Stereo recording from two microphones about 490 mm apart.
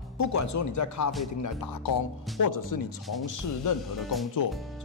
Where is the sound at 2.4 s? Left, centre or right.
Left.